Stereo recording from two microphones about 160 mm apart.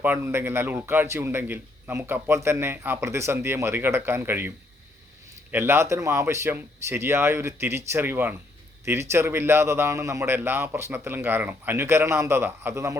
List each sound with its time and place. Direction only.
0.0 s a man's voice: 15° right (ahead or behind)